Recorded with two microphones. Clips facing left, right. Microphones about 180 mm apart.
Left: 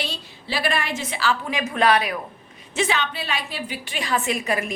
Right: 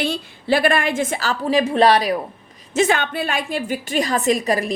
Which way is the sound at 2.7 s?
50° right (ahead or behind).